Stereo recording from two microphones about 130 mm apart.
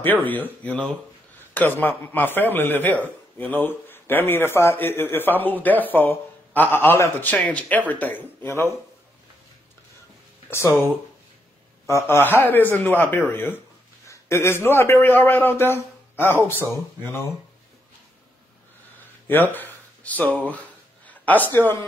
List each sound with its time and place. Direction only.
0.0 s a man's voice: 15° left (ahead or behind)
10.5 s speech: 20° left (ahead or behind)
11.9 s a man's voice: 15° left (ahead or behind)
19.2 s a sound: 15° left (ahead or behind)